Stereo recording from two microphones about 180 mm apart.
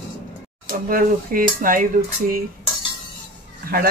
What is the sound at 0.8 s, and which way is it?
Speech, 50° right (ahead or behind).